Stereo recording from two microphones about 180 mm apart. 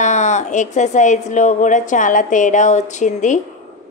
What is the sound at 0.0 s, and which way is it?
A woman's voice, 40° left (ahead or behind).